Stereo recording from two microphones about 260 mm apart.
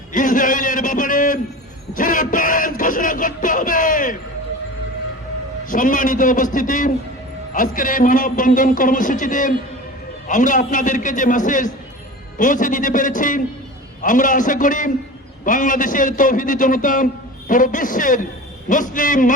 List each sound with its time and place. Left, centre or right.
0.1 s a sound: left
1.9 s speech: left
5.6 s a man's voice: left